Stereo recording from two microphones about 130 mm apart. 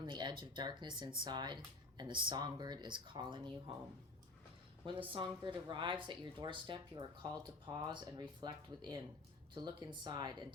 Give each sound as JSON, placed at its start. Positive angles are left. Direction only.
{"t": 0.0, "sound": "speech", "side_deg": -35}
{"t": 4.9, "sound": "speech", "side_deg": -40}